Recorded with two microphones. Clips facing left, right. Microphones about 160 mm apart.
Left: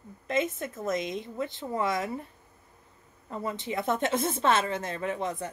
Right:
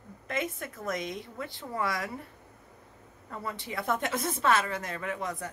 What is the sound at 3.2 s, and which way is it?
A woman's voice, 20° left (ahead or behind).